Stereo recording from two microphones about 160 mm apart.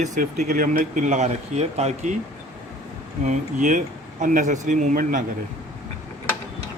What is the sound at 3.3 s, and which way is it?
Speech, 55° right (ahead or behind).